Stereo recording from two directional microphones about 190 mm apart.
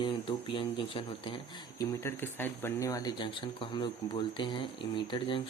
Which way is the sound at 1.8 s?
15° left (ahead or behind).